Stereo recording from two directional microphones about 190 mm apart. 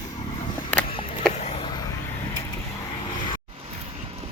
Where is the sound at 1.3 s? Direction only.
35° left (ahead or behind).